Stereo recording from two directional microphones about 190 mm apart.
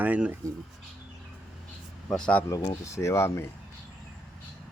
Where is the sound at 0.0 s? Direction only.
10° right (ahead or behind).